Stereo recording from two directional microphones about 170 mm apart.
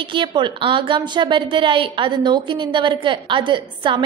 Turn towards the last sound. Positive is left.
turn(degrees=-30)  # may be behind; listen again after turning